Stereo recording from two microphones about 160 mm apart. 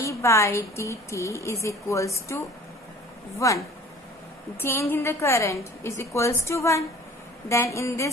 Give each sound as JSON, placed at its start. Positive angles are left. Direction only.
{"t": 0.0, "sound": "a woman's voice", "side_deg": 20}